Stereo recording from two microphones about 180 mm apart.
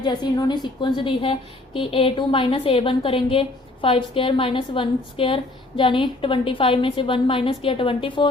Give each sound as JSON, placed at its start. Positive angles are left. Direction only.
{"t": 0.0, "sound": "a woman's voice", "side_deg": 25}